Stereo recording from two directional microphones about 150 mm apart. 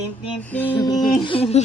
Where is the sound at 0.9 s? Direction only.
30° left (ahead or behind).